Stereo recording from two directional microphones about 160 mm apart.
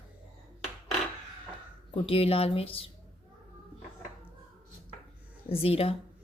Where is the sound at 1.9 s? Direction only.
35° left (ahead or behind).